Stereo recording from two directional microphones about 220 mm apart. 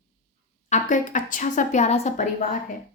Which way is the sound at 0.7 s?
35° left (ahead or behind).